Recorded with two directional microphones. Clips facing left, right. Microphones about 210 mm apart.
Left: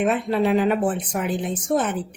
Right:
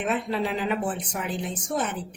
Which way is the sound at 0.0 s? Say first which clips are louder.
Left 6 dB; 55° left (ahead or behind).